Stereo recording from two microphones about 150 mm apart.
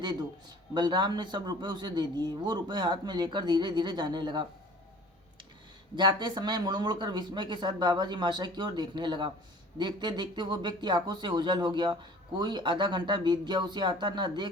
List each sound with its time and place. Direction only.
0.7 s speech: 30° right (ahead or behind)
6.0 s speech: 30° right (ahead or behind)